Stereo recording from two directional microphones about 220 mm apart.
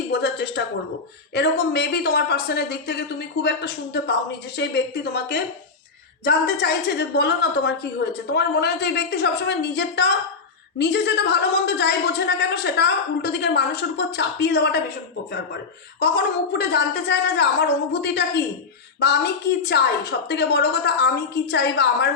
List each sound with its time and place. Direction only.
0.1 s a woman's voice: 50° left (ahead or behind)
16.0 s a woman's voice: 50° left (ahead or behind)